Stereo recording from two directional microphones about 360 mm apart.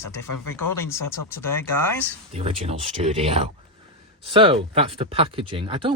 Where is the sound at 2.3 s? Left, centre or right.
Centre.